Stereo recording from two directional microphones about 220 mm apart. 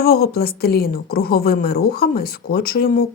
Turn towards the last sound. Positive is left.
turn(degrees=40)  # may be behind; listen again after turning